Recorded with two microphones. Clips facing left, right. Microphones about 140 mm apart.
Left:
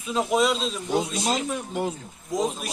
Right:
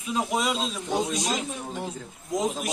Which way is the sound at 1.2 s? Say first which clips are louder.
Left 3 dB; 70° left (ahead or behind).